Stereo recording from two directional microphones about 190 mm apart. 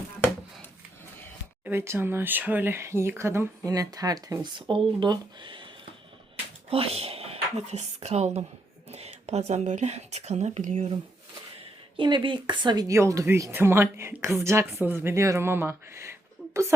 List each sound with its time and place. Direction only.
1.6 s a woman's voice: 15° right (ahead or behind); by 10.9 s 40° right (ahead or behind)
11.9 s speech: 25° right (ahead or behind)
16.4 s a sound: 5° right (ahead or behind)